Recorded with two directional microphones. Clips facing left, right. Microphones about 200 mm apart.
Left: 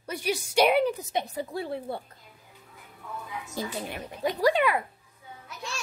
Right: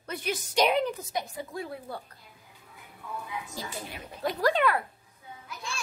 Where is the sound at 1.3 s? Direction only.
30° left (ahead or behind).